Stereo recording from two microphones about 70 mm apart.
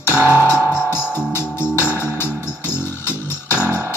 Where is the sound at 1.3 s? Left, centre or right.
Left.